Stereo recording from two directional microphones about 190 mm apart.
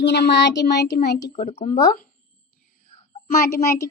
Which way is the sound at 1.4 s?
35° left (ahead or behind).